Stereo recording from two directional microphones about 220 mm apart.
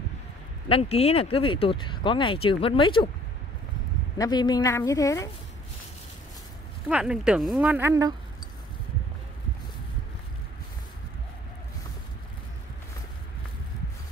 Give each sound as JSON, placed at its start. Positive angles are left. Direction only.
{"t": 0.7, "sound": "speech", "side_deg": 25}
{"t": 4.2, "sound": "a woman's voice", "side_deg": 20}
{"t": 6.9, "sound": "speech", "side_deg": -5}